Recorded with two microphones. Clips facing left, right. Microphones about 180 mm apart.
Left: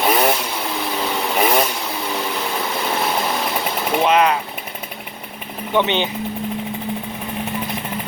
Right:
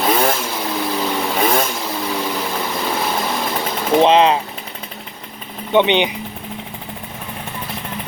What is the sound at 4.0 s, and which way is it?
Speech, 30° right (ahead or behind).